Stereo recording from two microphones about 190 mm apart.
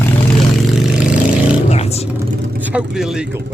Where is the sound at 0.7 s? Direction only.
5° right (ahead or behind).